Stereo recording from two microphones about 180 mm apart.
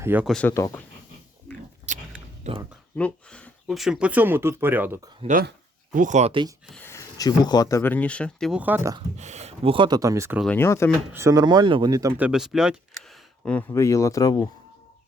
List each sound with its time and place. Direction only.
0.0 s speech: 10° right (ahead or behind)
0.3 s speech: 5° left (ahead or behind)
0.5 s speech: 15° left (ahead or behind)
1.9 s a sound: 40° right (ahead or behind)
2.5 s speech: 40° right (ahead or behind)
2.9 s speech: 5° left (ahead or behind); by 4.9 s 10° right (ahead or behind)
5.2 s speech: 30° right (ahead or behind)
5.9 s speech: 45° right (ahead or behind)
6.7 s speech: 10° left (ahead or behind); by 9.0 s 15° right (ahead or behind)
9.1 s speech: 40° right (ahead or behind); by 10.4 s 15° right (ahead or behind)
10.4 s speech: 10° left (ahead or behind)
11.1 s speech: 15° right (ahead or behind)
12.2 s speech: 5° right (ahead or behind); by 14.4 s 20° left (ahead or behind)